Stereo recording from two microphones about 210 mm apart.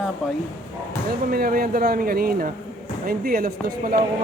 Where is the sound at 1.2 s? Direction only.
45° right (ahead or behind).